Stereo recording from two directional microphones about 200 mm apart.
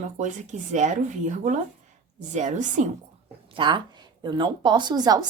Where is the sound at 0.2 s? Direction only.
40° right (ahead or behind).